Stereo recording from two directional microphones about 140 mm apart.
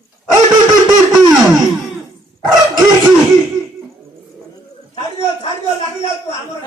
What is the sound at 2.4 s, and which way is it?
Dog, 30° right (ahead or behind).